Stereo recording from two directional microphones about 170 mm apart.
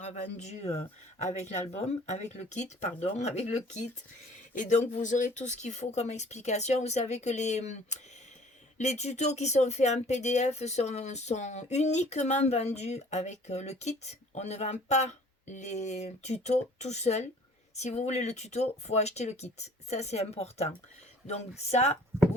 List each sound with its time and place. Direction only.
0.0 s speech: 40° left (ahead or behind)